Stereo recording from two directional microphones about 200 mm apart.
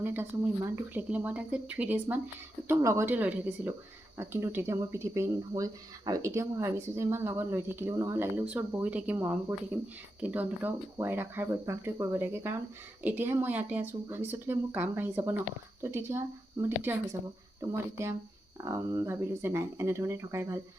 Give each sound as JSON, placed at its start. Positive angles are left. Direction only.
{"t": 0.0, "sound": "speech", "side_deg": -10}